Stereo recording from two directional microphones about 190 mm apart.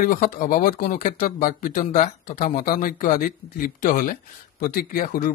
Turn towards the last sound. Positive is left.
turn(degrees=50)  # may be behind; listen again after turning